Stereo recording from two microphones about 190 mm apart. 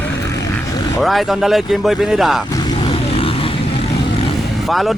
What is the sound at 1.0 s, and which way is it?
Speech, centre (ahead or behind).